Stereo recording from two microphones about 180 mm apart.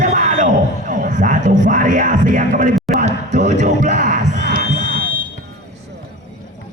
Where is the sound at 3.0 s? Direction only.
40° right (ahead or behind).